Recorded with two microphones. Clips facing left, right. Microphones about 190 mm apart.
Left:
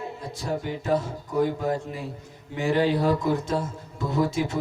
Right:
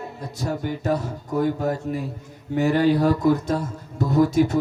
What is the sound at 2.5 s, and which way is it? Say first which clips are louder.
A man's voice: right 4 dB; 45° right (ahead or behind).